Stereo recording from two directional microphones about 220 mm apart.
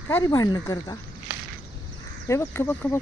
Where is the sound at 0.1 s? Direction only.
15° left (ahead or behind).